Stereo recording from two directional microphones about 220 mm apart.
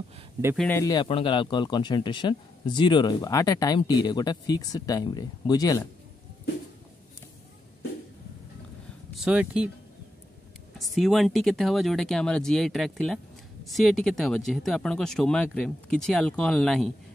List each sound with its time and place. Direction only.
0.6 s speech: 10° left (ahead or behind)
9.1 s speech: 5° right (ahead or behind)
11.0 s speech: centre (ahead or behind)